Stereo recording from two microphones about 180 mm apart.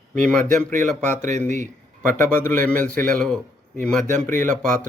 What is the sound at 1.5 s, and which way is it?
Speech, 40° right (ahead or behind).